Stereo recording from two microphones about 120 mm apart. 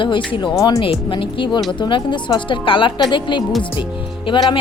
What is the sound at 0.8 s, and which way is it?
A woman's voice, 45° left (ahead or behind).